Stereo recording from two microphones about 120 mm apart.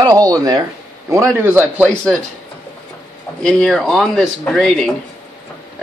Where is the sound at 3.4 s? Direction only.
5° left (ahead or behind).